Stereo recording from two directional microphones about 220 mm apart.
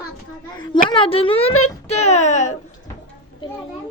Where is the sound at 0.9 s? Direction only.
25° left (ahead or behind).